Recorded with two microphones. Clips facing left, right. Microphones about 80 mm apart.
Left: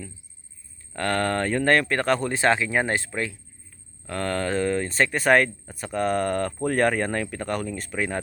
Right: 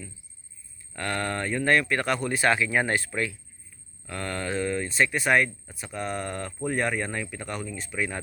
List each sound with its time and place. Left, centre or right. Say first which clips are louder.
0.9 s speech: left 5 dB; left
4.0 s speech: left 5 dB; left